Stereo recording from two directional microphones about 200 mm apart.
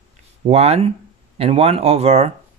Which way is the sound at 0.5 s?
30° right (ahead or behind).